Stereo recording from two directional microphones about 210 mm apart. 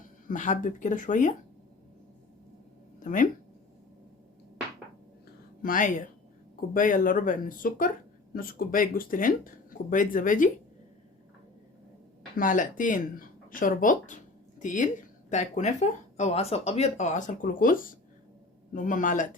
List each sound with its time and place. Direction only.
0.3 s speech: 35° left (ahead or behind)
3.0 s speech: 40° left (ahead or behind)
5.6 s speech: 40° left (ahead or behind)
12.4 s speech: 40° left (ahead or behind)